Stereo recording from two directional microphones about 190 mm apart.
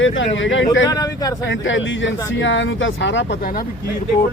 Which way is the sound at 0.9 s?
20° left (ahead or behind).